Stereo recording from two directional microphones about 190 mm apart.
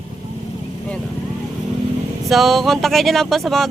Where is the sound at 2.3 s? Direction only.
Centre (ahead or behind).